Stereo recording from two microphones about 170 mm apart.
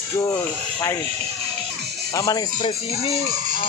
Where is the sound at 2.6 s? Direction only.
35° left (ahead or behind).